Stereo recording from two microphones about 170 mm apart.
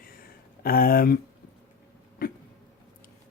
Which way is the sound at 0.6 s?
60° left (ahead or behind).